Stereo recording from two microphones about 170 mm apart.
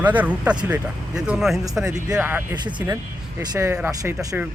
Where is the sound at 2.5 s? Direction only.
25° right (ahead or behind).